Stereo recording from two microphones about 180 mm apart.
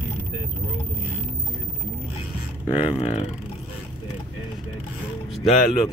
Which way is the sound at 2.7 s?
30° left (ahead or behind).